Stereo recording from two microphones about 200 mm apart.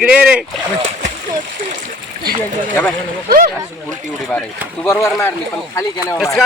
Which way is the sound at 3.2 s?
45° right (ahead or behind).